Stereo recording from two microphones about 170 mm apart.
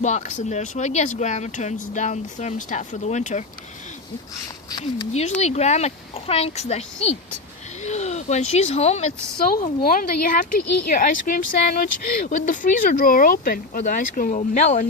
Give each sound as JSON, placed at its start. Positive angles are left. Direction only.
{"t": 0.0, "sound": "speech", "side_deg": 45}
{"t": 4.7, "sound": "speech", "side_deg": 25}
{"t": 5.4, "sound": "a child's voice", "side_deg": 40}
{"t": 9.6, "sound": "speech", "side_deg": 55}